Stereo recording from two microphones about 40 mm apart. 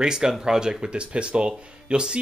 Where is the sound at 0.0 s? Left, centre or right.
Centre.